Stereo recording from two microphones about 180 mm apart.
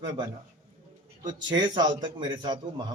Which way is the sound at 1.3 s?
25° right (ahead or behind).